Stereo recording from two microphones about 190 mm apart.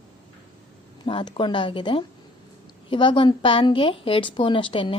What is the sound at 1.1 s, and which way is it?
A woman's voice, 25° left (ahead or behind).